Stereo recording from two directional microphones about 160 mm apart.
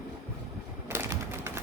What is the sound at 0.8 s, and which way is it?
Typewriter, 15° right (ahead or behind).